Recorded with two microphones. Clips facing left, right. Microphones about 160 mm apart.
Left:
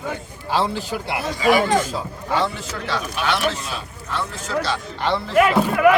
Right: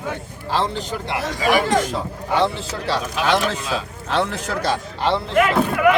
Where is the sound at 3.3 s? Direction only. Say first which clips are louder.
Right 3 dB; 90° right; by 4.7 s 55° right (ahead or behind).